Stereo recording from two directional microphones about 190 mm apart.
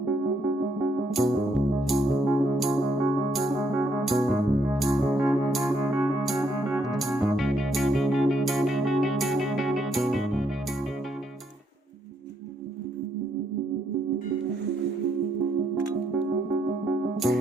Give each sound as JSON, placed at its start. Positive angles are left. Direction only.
{"t": 0.0, "sound": "music", "side_deg": 0}
{"t": 16.1, "sound": "music", "side_deg": -5}